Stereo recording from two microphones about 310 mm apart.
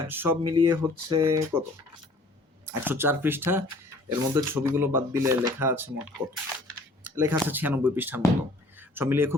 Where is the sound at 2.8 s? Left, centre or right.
Centre.